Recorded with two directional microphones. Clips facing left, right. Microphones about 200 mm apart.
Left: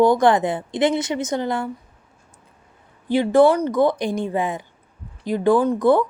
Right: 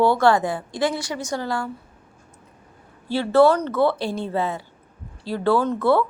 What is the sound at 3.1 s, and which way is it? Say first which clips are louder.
A woman's voice: left 2 dB; 15° left (ahead or behind).